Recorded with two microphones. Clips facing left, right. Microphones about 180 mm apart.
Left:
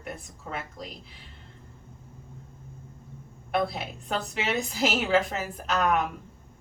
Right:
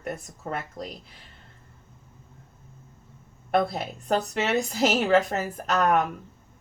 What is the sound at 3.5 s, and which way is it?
A woman's voice, 45° right (ahead or behind).